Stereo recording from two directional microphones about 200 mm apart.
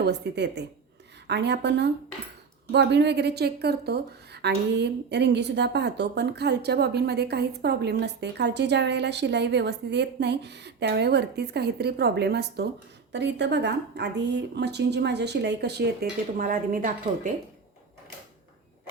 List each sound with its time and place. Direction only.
0.0 s a woman's voice: 55° right (ahead or behind)